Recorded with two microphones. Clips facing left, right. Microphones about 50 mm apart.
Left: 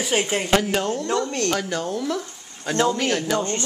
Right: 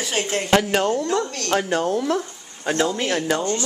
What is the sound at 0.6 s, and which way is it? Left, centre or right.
Speech, right.